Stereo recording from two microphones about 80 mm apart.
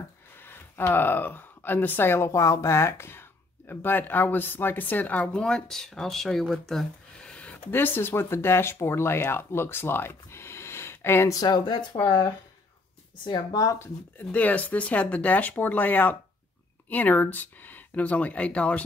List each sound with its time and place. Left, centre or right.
0.4 s speech: left; by 7.3 s centre
7.3 s a sound: centre
7.7 s speech: left
11.3 s speech: left
13.7 s speech: left